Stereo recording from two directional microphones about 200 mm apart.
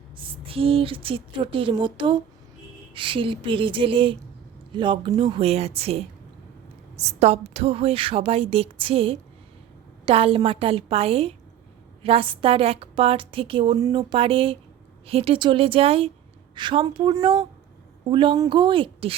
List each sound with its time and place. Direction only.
0.2 s a woman's voice: 25° right (ahead or behind)